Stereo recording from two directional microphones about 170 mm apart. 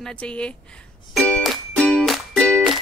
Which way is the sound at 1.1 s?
5° left (ahead or behind).